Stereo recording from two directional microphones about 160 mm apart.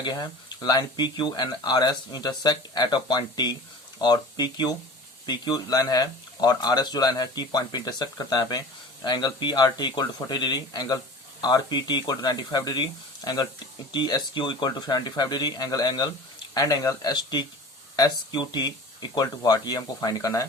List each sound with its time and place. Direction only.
0.0 s speech: 25° left (ahead or behind)